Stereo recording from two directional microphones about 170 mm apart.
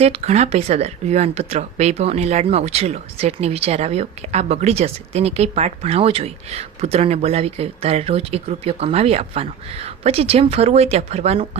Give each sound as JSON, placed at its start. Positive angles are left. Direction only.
{"t": 0.0, "sound": "speech", "side_deg": -35}